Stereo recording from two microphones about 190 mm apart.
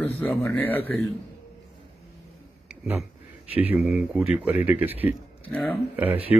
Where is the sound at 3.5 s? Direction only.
30° left (ahead or behind).